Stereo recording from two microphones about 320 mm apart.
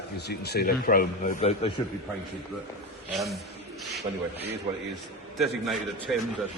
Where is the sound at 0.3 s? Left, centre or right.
Left.